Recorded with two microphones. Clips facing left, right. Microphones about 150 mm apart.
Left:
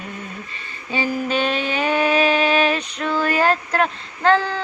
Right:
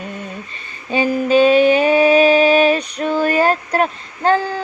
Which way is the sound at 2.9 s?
40° right (ahead or behind).